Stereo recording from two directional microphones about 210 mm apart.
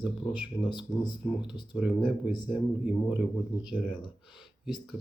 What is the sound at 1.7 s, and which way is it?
Speech, 5° right (ahead or behind).